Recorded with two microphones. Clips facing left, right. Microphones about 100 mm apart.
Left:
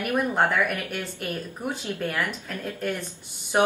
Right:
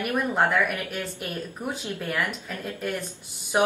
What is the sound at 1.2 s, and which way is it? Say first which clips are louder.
Speech: left 1 dB; 5° right (ahead or behind).